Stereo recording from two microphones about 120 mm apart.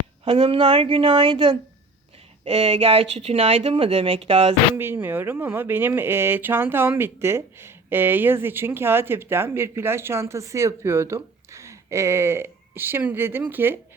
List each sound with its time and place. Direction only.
0.3 s speech: 50° right (ahead or behind)
4.7 s speech: 20° right (ahead or behind)